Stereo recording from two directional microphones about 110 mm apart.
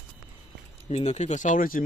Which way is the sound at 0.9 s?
90° left.